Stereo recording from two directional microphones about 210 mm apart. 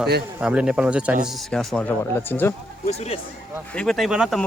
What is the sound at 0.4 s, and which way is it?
Speech, 5° right (ahead or behind).